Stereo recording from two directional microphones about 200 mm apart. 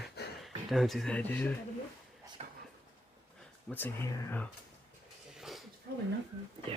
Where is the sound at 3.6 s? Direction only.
10° left (ahead or behind).